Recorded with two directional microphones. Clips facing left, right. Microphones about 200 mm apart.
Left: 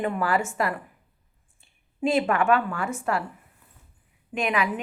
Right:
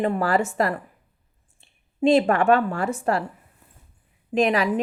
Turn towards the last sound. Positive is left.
turn(degrees=-35)  # may be behind; listen again after turning